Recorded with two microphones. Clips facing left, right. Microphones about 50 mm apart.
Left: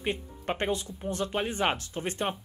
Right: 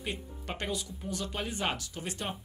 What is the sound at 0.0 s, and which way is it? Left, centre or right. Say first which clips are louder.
Speech: left 6 dB; left.